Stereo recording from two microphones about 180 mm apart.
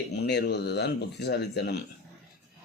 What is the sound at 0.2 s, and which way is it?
Speech, 65° left (ahead or behind).